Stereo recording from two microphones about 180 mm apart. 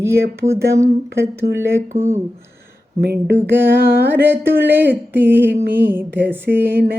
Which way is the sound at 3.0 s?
60° right (ahead or behind).